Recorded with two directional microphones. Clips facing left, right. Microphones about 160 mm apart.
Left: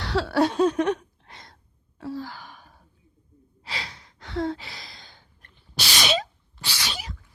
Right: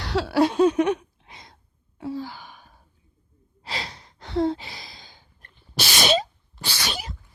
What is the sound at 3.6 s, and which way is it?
Gasp, 35° right (ahead or behind).